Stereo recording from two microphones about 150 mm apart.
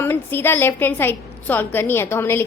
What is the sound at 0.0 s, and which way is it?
A woman's voice, 15° left (ahead or behind).